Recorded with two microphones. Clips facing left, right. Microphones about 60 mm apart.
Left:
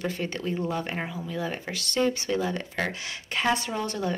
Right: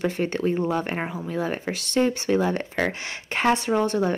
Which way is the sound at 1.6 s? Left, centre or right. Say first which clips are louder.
Right 2 dB; right.